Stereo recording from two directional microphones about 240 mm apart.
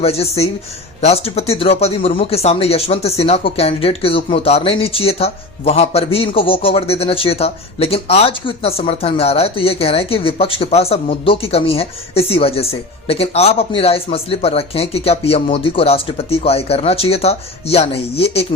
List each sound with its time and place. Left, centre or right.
0.0 s speech: left